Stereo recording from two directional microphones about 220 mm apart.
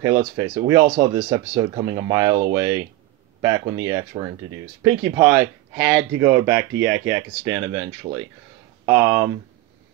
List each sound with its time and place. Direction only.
0.2 s speech: 15° right (ahead or behind)